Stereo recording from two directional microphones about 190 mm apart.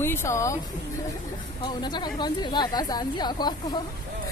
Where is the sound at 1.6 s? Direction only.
25° left (ahead or behind).